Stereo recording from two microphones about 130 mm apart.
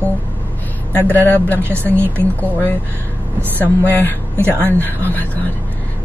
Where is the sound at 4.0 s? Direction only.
15° left (ahead or behind).